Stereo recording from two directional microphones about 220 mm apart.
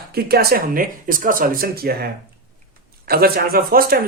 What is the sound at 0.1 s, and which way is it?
Speech, 45° right (ahead or behind).